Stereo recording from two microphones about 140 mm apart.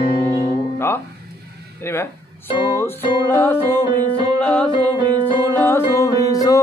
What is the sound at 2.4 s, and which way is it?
Music, 35° left (ahead or behind).